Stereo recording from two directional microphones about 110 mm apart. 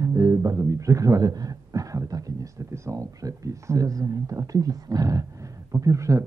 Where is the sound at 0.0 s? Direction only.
30° right (ahead or behind).